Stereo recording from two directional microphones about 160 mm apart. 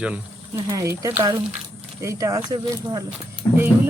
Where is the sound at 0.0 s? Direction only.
10° right (ahead or behind).